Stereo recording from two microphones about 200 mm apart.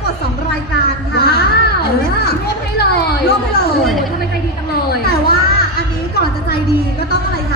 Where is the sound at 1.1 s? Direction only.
55° left (ahead or behind).